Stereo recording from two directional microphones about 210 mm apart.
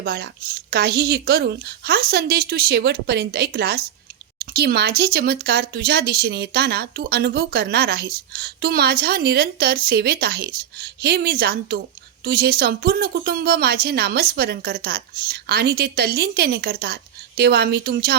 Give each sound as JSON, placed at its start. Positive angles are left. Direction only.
{"t": 0.0, "sound": "speech", "side_deg": -50}